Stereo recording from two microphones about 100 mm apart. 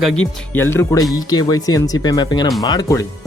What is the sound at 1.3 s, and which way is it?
Speech, 40° left (ahead or behind).